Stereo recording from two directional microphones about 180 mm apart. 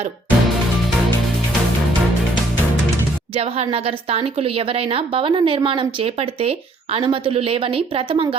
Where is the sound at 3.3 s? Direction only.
35° right (ahead or behind).